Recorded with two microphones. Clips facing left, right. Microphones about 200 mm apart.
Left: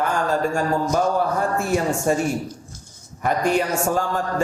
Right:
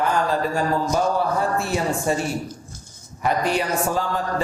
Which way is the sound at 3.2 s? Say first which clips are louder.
Left 2 dB; 45° left (ahead or behind).